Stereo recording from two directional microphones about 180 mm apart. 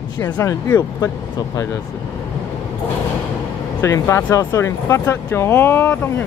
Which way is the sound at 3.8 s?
15° left (ahead or behind).